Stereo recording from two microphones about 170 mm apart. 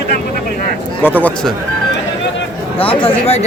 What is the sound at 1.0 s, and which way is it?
Speech, 10° left (ahead or behind).